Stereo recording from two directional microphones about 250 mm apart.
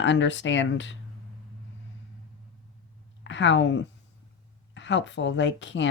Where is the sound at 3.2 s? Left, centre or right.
Left.